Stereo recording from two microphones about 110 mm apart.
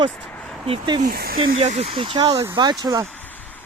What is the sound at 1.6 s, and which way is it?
Speech, 70° right (ahead or behind).